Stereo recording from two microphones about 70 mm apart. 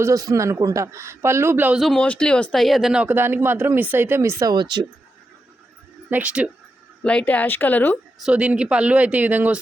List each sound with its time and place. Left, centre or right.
0.0 s a man's voice: right
2.0 s speech: centre
2.6 s speech: centre
2.9 s speech: centre
3.2 s speech: right
4.2 s a man's voice: right
4.5 s speech: right
6.1 s speech: right
7.0 s speech: centre
8.3 s speech: centre